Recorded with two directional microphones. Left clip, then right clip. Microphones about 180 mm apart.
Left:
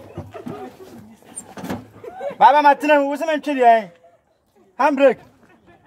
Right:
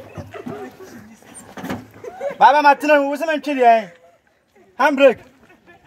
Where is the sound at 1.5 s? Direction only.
30° left (ahead or behind).